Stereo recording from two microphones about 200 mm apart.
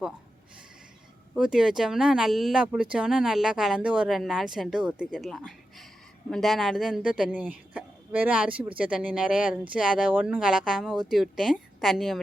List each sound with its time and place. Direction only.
1.4 s speech: 5° right (ahead or behind)